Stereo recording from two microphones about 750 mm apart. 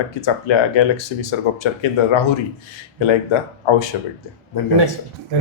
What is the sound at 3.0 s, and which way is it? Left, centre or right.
Speech, left.